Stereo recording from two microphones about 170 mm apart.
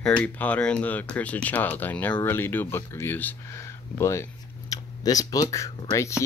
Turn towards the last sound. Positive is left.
turn(degrees=15)  # may be behind; listen again after turning